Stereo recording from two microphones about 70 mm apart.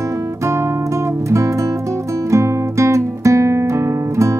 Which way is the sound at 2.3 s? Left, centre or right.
Right.